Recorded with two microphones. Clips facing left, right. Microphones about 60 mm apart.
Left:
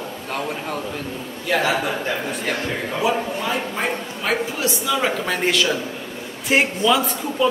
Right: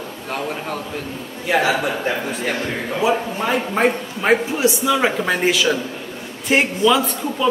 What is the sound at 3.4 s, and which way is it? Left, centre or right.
Speech, right.